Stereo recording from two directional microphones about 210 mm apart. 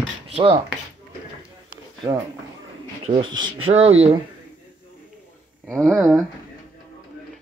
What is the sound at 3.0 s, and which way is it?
Speech, 25° right (ahead or behind).